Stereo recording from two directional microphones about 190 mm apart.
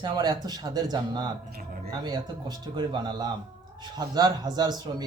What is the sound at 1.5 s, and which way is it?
Speech, 55° right (ahead or behind).